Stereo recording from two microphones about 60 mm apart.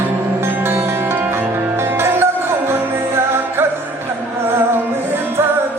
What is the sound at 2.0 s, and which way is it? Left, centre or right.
Music, right.